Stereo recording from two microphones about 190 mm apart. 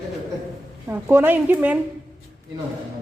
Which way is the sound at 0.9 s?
10° right (ahead or behind).